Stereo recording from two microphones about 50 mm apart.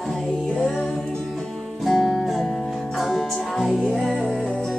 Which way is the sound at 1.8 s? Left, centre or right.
Centre.